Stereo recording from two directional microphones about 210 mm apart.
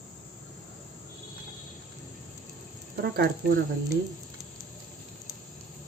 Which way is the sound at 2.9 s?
50° right (ahead or behind).